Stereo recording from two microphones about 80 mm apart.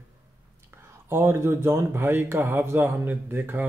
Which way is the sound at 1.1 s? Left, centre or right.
Right.